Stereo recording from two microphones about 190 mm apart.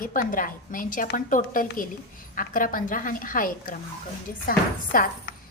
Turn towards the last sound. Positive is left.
turn(degrees=50)  # may be behind; listen again after turning